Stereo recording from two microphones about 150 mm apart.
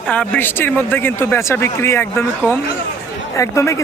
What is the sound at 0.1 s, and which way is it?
Speech, 10° left (ahead or behind).